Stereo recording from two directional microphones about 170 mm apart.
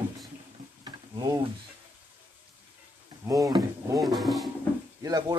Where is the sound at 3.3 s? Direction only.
20° right (ahead or behind).